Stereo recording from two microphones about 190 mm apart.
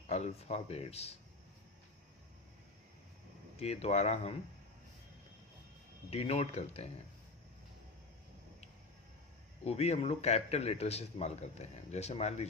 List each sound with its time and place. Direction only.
0.1 s a man's voice: 35° left (ahead or behind)
3.6 s a man's voice: 35° left (ahead or behind)
6.1 s a man's voice: 35° left (ahead or behind)
9.6 s a man's voice: 35° left (ahead or behind)